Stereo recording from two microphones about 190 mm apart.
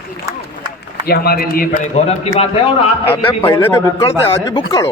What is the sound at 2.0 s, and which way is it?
Speech, 35° left (ahead or behind).